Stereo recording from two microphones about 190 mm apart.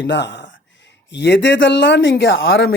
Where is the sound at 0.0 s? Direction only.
65° left (ahead or behind).